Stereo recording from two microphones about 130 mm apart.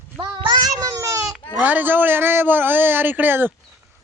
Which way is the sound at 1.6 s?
15° right (ahead or behind).